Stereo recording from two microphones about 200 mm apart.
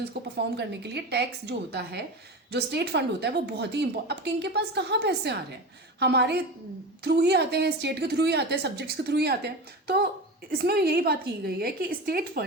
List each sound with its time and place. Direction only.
0.1 s a woman's voice: 55° right (ahead or behind)